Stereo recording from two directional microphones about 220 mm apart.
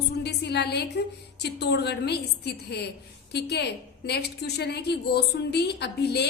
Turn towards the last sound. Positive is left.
turn(degrees=50)  # may be behind; listen again after turning